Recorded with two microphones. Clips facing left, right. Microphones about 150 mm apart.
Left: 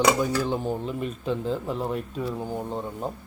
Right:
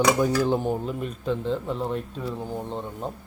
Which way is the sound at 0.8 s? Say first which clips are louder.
Even; centre (ahead or behind).